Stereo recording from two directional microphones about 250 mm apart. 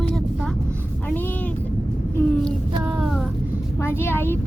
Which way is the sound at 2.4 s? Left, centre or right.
Centre.